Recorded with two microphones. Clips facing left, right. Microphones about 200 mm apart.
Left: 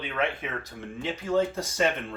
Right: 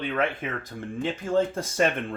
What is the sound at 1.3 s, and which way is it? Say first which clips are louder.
Speech: right 2 dB; 50° right (ahead or behind).